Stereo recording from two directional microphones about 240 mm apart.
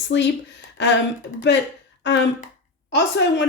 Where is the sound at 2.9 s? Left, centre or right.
Left.